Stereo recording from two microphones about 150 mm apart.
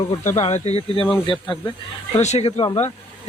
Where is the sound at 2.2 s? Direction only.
45° left (ahead or behind).